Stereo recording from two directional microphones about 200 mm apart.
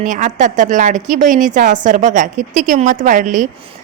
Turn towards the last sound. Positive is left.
turn(degrees=-40)  # may be behind; listen again after turning